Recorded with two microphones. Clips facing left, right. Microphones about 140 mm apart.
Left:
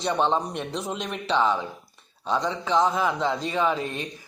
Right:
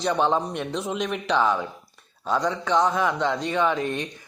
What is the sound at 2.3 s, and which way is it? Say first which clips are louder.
A man's voice: right 1 dB; 25° left (ahead or behind).